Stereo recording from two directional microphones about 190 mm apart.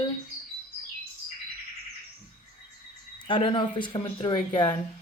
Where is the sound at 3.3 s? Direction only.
25° left (ahead or behind).